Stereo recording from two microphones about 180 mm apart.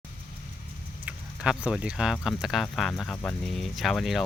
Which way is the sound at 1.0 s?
5° right (ahead or behind).